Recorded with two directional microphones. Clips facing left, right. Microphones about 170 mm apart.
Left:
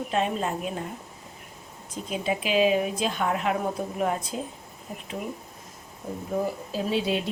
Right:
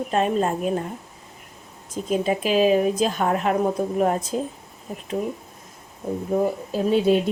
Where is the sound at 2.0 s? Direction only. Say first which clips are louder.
Right 6 dB; 45° right (ahead or behind).